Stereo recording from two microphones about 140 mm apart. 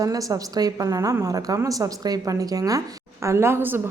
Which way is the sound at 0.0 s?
25° right (ahead or behind).